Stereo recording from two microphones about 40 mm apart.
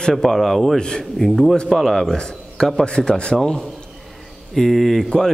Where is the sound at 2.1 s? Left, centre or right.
Centre.